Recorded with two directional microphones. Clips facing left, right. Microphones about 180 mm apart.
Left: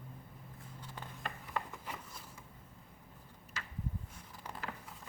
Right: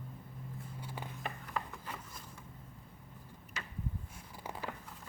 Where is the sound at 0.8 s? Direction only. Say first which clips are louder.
Right 2 dB; 10° right (ahead or behind).